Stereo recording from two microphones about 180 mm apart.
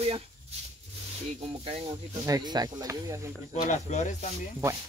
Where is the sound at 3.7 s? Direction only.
40° left (ahead or behind).